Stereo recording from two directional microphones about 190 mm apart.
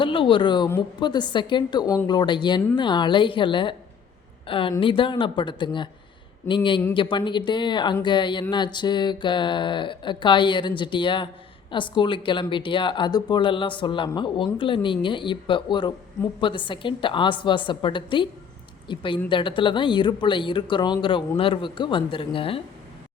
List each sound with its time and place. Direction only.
0.0 s a woman's voice: 25° left (ahead or behind)